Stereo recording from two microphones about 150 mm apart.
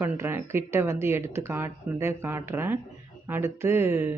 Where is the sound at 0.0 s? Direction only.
15° right (ahead or behind).